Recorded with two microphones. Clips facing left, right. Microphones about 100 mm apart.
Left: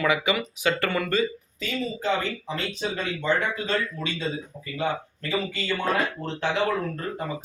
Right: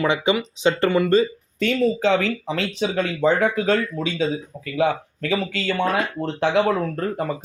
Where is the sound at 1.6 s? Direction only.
65° right (ahead or behind); by 5.8 s 90° right.